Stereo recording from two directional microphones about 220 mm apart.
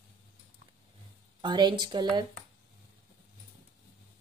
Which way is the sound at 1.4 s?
20° right (ahead or behind).